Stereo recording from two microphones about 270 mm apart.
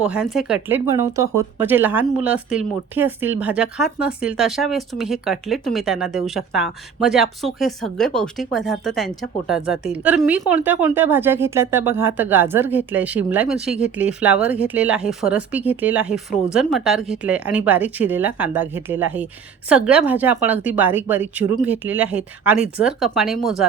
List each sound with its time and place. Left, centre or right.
0.0 s speech: centre